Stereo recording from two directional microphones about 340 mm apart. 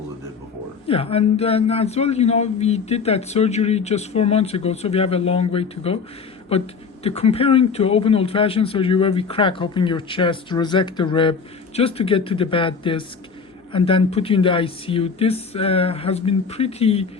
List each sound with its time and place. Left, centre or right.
0.9 s speech: centre